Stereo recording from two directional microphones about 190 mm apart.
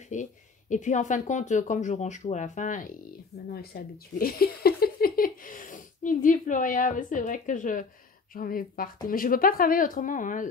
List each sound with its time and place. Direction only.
0.1 s speech: 40° left (ahead or behind)
3.7 s speech: 55° left (ahead or behind)